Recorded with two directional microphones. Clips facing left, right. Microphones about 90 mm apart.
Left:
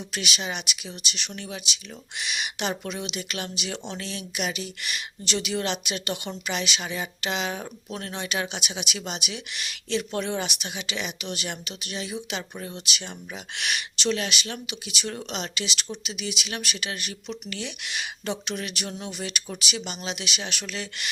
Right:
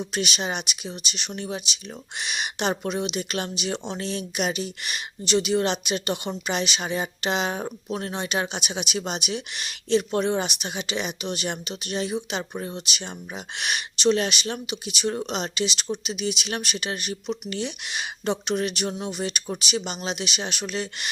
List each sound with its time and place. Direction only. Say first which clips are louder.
0.0 s speech: right 4 dB; 30° right (ahead or behind)
2.1 s speech: right 2 dB; 30° right (ahead or behind)
11.9 s speech: right 5 dB; 35° right (ahead or behind)